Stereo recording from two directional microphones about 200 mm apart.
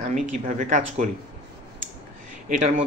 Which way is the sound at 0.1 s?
40° right (ahead or behind).